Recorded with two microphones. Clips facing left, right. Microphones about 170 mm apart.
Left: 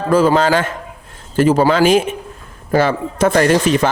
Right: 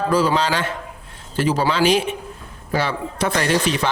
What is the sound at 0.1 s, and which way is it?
Speech, 50° left (ahead or behind).